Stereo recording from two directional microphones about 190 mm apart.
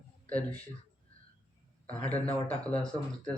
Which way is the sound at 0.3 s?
5° left (ahead or behind).